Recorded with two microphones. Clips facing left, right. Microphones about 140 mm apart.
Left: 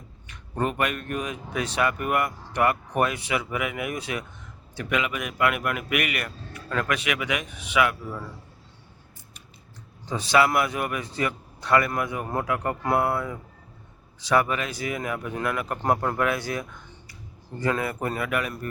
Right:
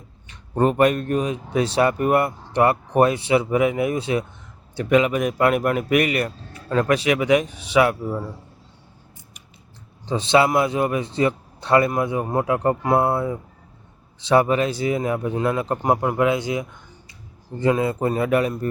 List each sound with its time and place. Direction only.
0.3 s speech: 35° right (ahead or behind)
10.1 s a man's voice: 25° right (ahead or behind)
15.8 s a man's voice: 15° right (ahead or behind)